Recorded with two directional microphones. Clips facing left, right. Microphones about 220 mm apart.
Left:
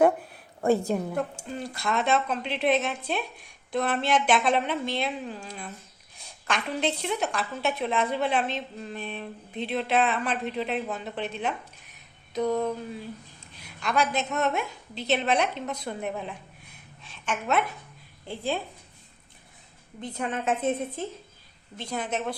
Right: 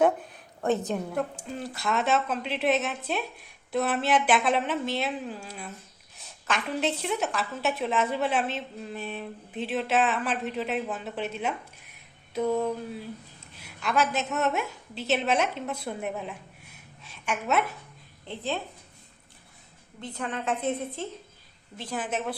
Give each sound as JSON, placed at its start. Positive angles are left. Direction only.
{"t": 0.0, "sound": "a sound", "side_deg": 10}
{"t": 0.9, "sound": "a woman's voice", "side_deg": 5}
{"t": 18.3, "sound": "speech", "side_deg": 10}
{"t": 20.0, "sound": "a woman's voice", "side_deg": 20}
{"t": 21.8, "sound": "a woman's voice", "side_deg": -5}